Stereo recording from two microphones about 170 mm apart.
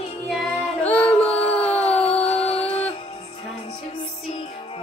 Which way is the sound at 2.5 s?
40° left (ahead or behind).